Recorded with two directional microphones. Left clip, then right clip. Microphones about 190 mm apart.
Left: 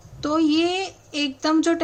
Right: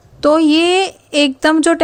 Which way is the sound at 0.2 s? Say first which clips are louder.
Right 9 dB; 45° right (ahead or behind).